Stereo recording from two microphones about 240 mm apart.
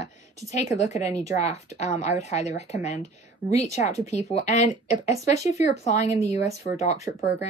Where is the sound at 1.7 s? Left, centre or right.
Left.